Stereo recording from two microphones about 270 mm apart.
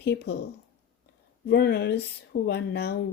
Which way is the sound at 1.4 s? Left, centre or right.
Left.